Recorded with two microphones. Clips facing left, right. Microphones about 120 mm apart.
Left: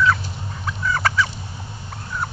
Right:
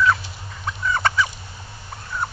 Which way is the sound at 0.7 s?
Centre (ahead or behind).